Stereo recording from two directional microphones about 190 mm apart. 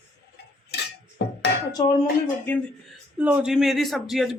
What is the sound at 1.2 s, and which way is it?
Music, 65° left (ahead or behind).